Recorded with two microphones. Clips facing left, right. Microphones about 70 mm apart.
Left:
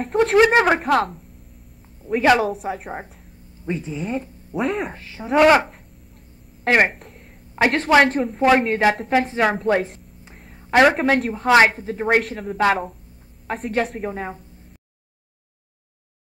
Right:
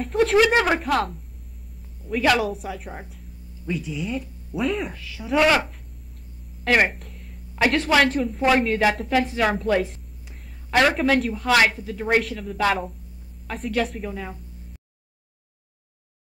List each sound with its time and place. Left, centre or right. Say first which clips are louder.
0.0 s speech: left 3 dB; left
3.6 s speech: left 2 dB; left
6.9 s a sound: left 1 dB; left
7.6 s speech: left 3 dB; left
10.7 s speech: left 5 dB; left
11.0 s speech: left 1 dB; left